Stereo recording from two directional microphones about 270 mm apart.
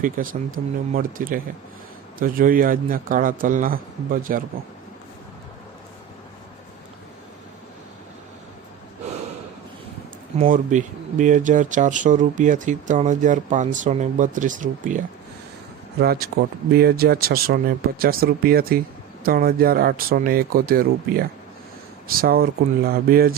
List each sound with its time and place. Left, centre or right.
0.0 s a man's voice: right
10.4 s a man's voice: right